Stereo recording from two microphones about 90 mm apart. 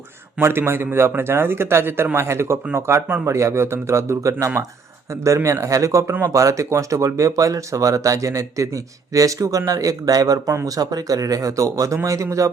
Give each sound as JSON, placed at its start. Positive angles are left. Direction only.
{"t": 0.3, "sound": "speech", "side_deg": -25}